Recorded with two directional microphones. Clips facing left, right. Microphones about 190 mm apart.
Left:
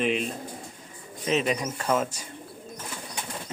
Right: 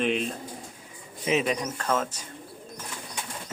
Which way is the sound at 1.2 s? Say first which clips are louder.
Even; 10° right (ahead or behind).